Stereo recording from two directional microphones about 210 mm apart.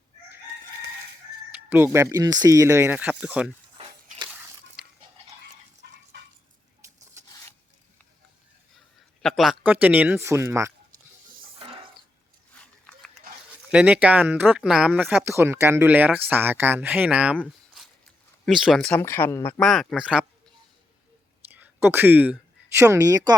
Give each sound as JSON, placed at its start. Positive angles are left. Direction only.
{"t": 1.7, "sound": "speech", "side_deg": -10}
{"t": 3.8, "sound": "a sound", "side_deg": -25}
{"t": 4.3, "sound": "a sound", "side_deg": -5}
{"t": 5.8, "sound": "fowl", "side_deg": -50}
{"t": 9.2, "sound": "speech", "side_deg": 0}
{"t": 12.5, "sound": "speech", "side_deg": 5}
{"t": 17.8, "sound": "a sound", "side_deg": 0}
{"t": 18.4, "sound": "speech", "side_deg": 0}
{"t": 21.5, "sound": "speech", "side_deg": -10}